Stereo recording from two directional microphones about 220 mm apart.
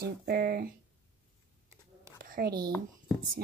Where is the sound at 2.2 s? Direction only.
40° right (ahead or behind).